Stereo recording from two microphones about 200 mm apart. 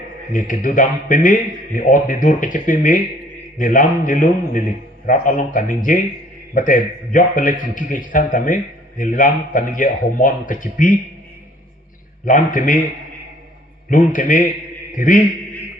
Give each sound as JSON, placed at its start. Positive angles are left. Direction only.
{"t": 0.3, "sound": "a man's voice", "side_deg": 40}
{"t": 12.2, "sound": "a man's voice", "side_deg": 40}
{"t": 13.9, "sound": "a man's voice", "side_deg": 40}